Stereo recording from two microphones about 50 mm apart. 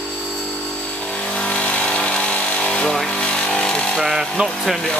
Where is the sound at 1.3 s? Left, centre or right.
Left.